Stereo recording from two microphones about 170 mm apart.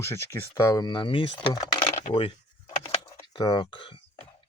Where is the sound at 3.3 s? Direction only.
25° left (ahead or behind).